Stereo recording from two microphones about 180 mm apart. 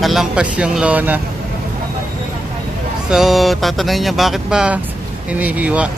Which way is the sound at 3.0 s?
Centre (ahead or behind).